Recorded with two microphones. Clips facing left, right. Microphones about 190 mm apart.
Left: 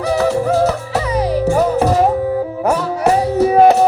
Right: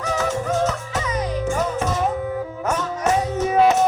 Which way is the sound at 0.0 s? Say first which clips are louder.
Left 8 dB; 35° left (ahead or behind).